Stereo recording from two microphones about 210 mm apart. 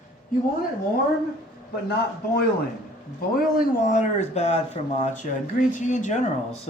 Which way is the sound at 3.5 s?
40° left (ahead or behind).